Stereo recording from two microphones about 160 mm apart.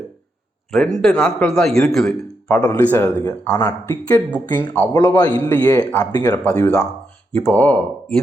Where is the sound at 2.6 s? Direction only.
15° left (ahead or behind).